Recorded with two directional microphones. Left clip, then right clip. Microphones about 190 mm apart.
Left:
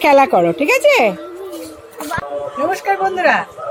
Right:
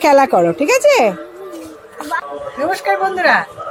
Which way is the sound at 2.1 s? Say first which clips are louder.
Right 3 dB; 35° left (ahead or behind).